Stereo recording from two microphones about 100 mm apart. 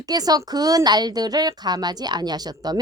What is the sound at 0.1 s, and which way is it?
A woman's voice, 40° right (ahead or behind).